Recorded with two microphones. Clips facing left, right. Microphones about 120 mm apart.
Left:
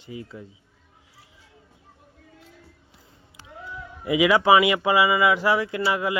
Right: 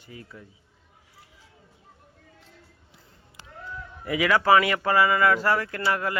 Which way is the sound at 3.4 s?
10° left (ahead or behind).